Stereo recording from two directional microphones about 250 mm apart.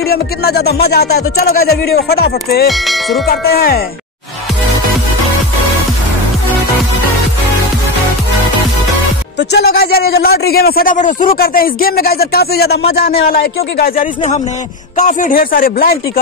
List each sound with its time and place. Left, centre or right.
0.1 s a man's voice: left
2.7 s speech: centre
3.3 s a man's voice: left
9.4 s a man's voice: left